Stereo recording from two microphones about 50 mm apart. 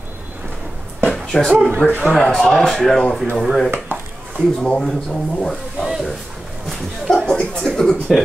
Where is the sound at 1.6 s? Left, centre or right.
Left.